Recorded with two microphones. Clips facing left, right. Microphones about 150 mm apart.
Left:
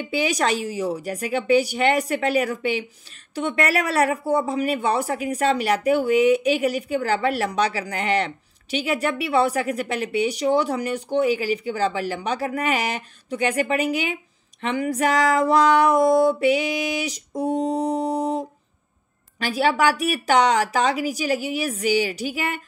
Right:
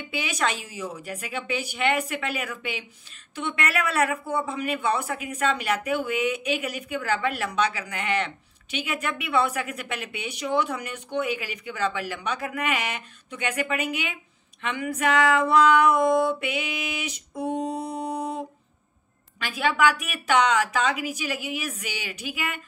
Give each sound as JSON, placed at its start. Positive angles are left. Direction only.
{"t": 0.0, "sound": "speech", "side_deg": 35}